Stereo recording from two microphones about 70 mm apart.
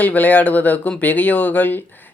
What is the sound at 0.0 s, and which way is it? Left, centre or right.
A man's voice, left.